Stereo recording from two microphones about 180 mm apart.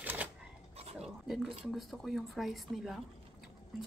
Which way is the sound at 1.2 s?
Centre (ahead or behind).